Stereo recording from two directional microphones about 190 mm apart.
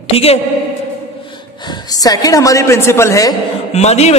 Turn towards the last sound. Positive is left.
turn(degrees=35)  # may be behind; listen again after turning